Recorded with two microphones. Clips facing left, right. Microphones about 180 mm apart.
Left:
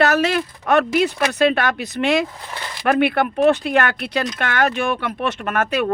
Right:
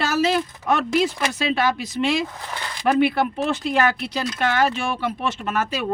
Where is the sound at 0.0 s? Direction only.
65° left (ahead or behind).